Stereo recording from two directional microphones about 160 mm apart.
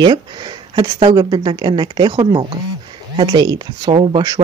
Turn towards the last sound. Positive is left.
turn(degrees=-25)  # may be behind; listen again after turning